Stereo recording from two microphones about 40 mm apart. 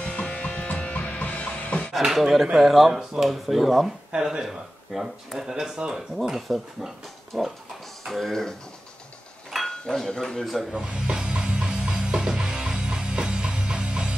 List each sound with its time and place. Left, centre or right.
0.0 s music: left
2.0 s speech: centre
4.1 s speech: centre
4.5 s speech: centre
6.1 s speech: centre
9.7 s speech: centre
10.4 s speech: centre
10.9 s music: right